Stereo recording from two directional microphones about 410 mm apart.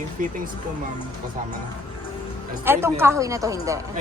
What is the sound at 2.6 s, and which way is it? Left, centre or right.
A woman's voice, centre.